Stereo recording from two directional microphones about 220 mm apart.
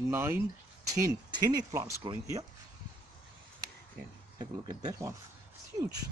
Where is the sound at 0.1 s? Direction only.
10° right (ahead or behind).